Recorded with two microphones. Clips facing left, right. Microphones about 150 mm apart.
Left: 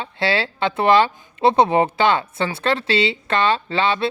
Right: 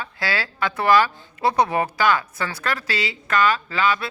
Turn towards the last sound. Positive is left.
turn(degrees=30)  # may be behind; listen again after turning